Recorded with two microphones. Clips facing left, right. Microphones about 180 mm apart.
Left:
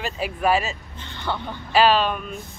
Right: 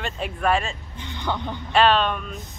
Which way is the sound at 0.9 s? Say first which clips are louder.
Right 3 dB; 15° right (ahead or behind).